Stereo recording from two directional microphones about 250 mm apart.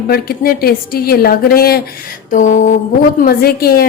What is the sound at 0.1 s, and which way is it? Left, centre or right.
A woman's voice, left.